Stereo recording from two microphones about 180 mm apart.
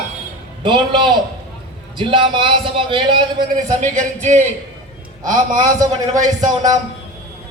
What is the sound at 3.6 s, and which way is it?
Speech, 45° right (ahead or behind).